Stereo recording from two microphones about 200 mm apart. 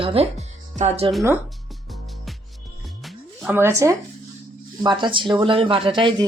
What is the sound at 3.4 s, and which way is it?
Speech, 10° right (ahead or behind).